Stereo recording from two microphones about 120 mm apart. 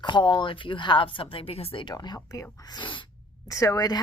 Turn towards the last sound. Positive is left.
turn(degrees=30)  # may be behind; listen again after turning